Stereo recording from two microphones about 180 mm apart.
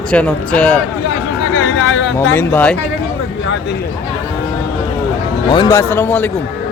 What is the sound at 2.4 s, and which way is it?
Speech, 10° left (ahead or behind).